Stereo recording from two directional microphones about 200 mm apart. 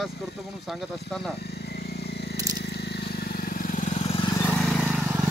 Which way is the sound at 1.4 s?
55° left (ahead or behind).